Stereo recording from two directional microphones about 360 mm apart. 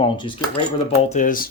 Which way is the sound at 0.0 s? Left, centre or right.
Centre.